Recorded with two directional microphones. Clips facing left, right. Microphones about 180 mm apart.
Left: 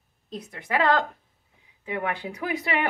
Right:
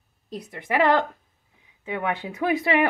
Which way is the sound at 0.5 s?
15° right (ahead or behind).